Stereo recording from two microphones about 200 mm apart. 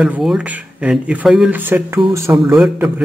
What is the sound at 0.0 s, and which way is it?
Speech, 5° right (ahead or behind).